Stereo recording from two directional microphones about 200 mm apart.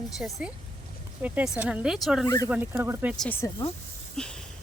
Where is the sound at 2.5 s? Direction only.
10° right (ahead or behind).